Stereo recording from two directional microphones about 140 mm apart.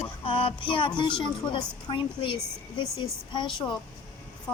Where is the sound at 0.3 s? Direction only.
40° left (ahead or behind).